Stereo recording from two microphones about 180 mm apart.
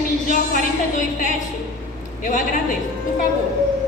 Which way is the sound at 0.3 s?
45° left (ahead or behind).